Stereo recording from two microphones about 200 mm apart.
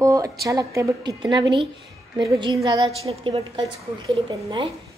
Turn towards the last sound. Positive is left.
turn(degrees=-25)  # may be behind; listen again after turning